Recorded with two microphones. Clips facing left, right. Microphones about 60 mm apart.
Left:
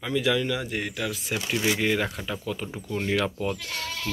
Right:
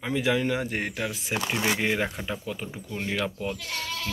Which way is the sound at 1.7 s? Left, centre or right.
Right.